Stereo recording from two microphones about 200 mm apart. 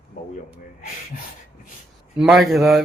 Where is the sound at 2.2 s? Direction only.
Centre (ahead or behind).